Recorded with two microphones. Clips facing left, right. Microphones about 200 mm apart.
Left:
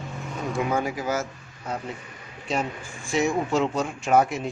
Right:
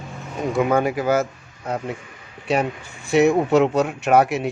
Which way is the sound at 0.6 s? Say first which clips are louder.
Right 7 dB; 60° right (ahead or behind).